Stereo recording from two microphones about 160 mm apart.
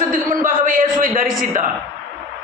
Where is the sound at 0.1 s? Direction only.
55° right (ahead or behind).